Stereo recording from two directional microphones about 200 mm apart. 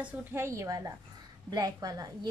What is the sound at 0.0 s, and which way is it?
A woman's voice, 10° right (ahead or behind).